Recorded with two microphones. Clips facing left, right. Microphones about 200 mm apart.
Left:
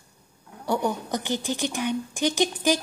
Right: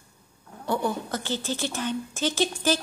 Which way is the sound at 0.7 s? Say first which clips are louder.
Left 1 dB; 15° left (ahead or behind).